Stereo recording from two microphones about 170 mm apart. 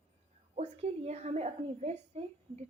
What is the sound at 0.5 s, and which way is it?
A woman's voice, 40° right (ahead or behind).